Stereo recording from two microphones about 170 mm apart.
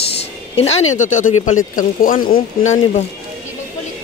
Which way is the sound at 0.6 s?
40° left (ahead or behind).